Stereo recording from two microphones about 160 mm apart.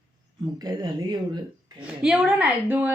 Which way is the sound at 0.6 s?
25° right (ahead or behind).